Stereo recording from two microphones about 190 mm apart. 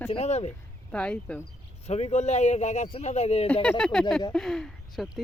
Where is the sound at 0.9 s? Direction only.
5° left (ahead or behind).